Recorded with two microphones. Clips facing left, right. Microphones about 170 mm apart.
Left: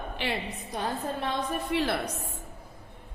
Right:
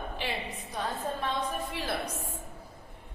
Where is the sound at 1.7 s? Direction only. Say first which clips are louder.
Left 8 dB; 70° left (ahead or behind).